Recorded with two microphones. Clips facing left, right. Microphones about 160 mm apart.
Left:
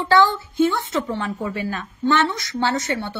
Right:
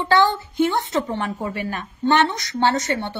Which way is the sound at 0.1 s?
20° right (ahead or behind).